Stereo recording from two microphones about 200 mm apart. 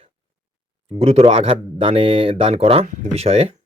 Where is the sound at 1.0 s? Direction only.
30° right (ahead or behind).